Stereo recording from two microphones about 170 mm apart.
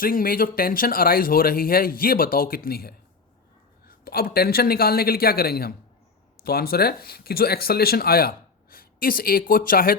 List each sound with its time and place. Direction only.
0.0 s speech: 55° left (ahead or behind)